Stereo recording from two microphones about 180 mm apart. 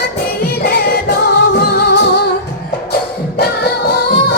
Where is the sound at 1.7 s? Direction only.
70° left (ahead or behind).